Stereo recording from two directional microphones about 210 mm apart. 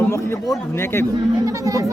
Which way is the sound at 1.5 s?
15° right (ahead or behind).